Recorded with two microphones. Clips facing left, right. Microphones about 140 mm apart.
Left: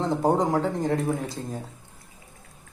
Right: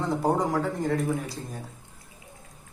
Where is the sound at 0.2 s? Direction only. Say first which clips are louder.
Left 3 dB; 25° left (ahead or behind).